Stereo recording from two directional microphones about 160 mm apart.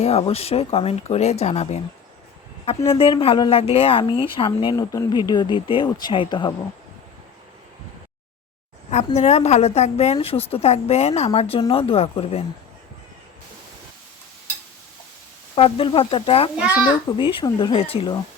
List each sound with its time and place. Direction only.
0.0 s speech: 40° left (ahead or behind)
8.9 s speech: 45° left (ahead or behind)
15.5 s speech: 35° left (ahead or behind)